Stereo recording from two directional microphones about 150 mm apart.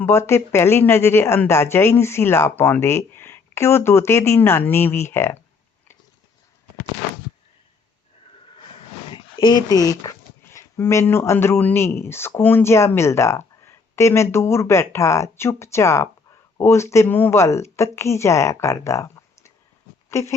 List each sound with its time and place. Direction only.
0.0 s speech: 15° left (ahead or behind)
9.1 s speech: 30° left (ahead or behind)